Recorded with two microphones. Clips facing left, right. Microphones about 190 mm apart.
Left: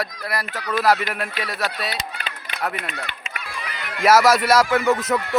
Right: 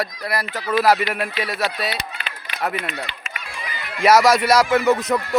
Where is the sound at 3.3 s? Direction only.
70° left (ahead or behind).